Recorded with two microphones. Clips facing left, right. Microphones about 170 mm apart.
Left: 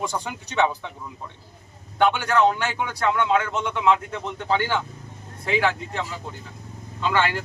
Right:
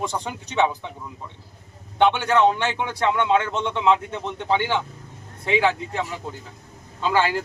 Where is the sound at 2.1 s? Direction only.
25° right (ahead or behind).